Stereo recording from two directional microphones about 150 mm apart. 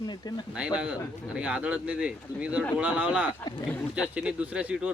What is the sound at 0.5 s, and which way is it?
Speech, 5° right (ahead or behind).